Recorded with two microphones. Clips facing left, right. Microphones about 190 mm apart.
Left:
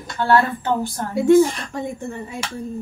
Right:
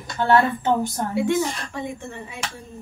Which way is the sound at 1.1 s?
45° left (ahead or behind).